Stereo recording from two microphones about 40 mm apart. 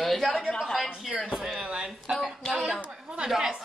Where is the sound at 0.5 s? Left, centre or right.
Centre.